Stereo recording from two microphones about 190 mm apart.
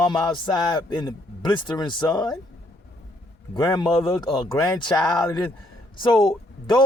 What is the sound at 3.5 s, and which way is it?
Speech, 20° left (ahead or behind).